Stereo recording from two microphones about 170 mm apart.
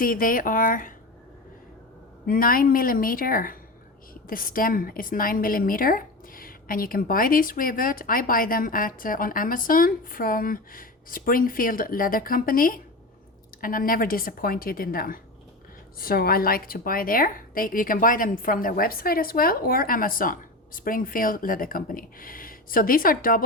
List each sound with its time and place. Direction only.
0.0 s a woman's voice: 55° left (ahead or behind)
2.2 s a woman's voice: 55° left (ahead or behind)